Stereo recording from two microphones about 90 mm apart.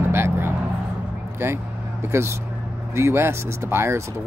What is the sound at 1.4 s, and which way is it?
Speech, 25° right (ahead or behind).